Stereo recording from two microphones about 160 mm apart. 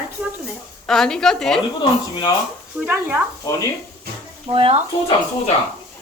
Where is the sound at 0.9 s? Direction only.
5° left (ahead or behind).